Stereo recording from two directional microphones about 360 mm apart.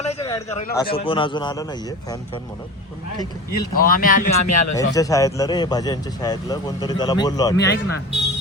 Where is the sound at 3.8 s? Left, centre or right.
Left.